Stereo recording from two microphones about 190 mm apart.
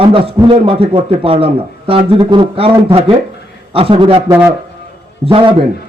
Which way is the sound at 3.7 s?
30° right (ahead or behind).